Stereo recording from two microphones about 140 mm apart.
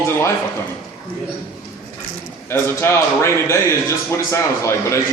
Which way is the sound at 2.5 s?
20° left (ahead or behind).